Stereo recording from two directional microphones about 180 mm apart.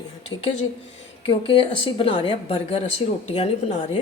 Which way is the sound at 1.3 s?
30° left (ahead or behind).